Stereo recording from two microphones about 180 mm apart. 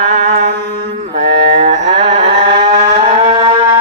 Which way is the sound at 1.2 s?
35° right (ahead or behind).